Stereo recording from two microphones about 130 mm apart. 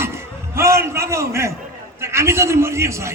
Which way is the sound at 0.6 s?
20° right (ahead or behind).